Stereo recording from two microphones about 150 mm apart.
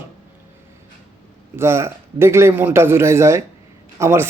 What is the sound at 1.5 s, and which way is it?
A man's voice, 20° right (ahead or behind).